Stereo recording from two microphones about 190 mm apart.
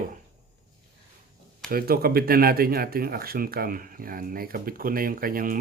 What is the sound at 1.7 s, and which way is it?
Speech, 50° right (ahead or behind).